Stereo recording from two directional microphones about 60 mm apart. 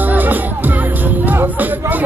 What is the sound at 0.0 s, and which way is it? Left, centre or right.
Music, right.